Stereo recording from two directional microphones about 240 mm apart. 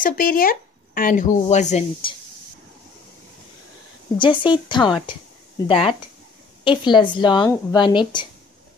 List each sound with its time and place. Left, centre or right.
0.0 s speech: left
4.2 s a woman's voice: left